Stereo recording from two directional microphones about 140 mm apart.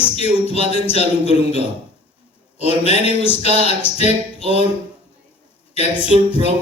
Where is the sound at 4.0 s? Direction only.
45° left (ahead or behind).